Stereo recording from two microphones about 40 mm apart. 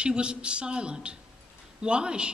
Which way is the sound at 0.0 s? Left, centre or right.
Right.